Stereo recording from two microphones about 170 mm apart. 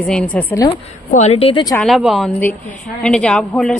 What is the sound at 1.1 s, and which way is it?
Speech, 40° left (ahead or behind).